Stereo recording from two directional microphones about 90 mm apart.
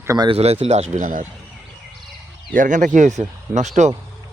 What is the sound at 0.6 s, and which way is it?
Speech, 90° right.